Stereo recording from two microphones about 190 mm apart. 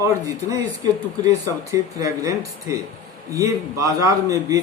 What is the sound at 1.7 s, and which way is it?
A man's voice, 15° right (ahead or behind).